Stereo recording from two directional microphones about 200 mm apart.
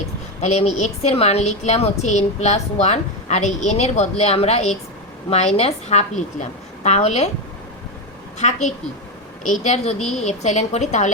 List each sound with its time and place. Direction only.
0.4 s a woman's voice: 35° left (ahead or behind)
8.4 s a woman's voice: 35° left (ahead or behind)